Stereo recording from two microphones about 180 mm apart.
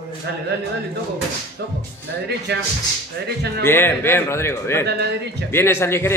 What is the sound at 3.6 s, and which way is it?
Speech, 10° left (ahead or behind).